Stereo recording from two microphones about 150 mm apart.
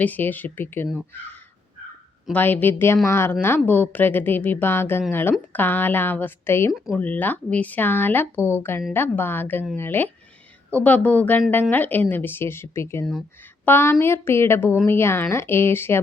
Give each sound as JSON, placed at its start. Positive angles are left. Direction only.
{"t": 0.0, "sound": "speech", "side_deg": 10}
{"t": 2.3, "sound": "speech", "side_deg": 10}